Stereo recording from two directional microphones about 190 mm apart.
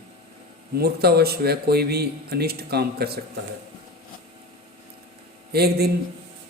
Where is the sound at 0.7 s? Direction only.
55° right (ahead or behind).